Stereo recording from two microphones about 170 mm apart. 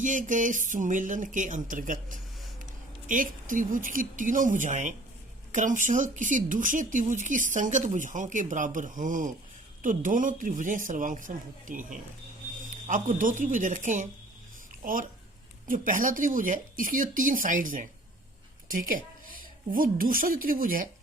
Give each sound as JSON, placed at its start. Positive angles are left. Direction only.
{"t": 0.0, "sound": "speech", "side_deg": -50}
{"t": 14.7, "sound": "a sound", "side_deg": -50}
{"t": 15.6, "sound": "a woman's voice", "side_deg": -55}